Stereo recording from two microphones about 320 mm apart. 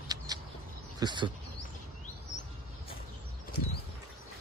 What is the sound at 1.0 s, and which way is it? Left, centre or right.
Speech, centre.